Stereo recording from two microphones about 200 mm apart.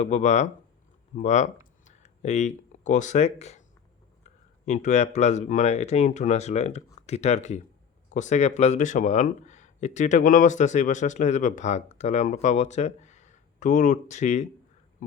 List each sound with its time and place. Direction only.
0.0 s speech: 35° left (ahead or behind)
4.6 s speech: 35° left (ahead or behind)